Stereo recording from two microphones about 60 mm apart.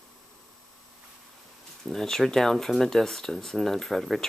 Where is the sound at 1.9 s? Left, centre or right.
Centre.